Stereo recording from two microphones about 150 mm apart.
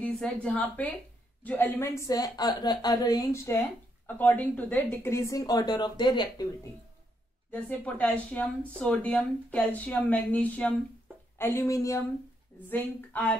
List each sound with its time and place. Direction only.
0.0 s a woman's voice: 5° left (ahead or behind); by 6.4 s 30° left (ahead or behind)
7.6 s a woman's voice: 10° left (ahead or behind)